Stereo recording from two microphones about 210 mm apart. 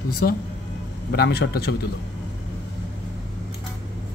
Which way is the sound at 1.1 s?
50° left (ahead or behind).